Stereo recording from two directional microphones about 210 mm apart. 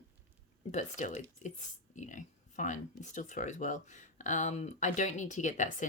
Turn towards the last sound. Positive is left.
turn(degrees=35)  # may be behind; listen again after turning